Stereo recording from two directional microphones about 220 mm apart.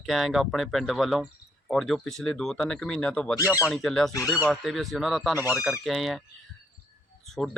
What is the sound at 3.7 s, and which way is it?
Speech, centre (ahead or behind).